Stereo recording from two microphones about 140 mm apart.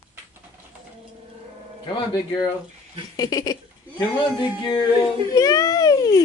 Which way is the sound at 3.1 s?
25° left (ahead or behind).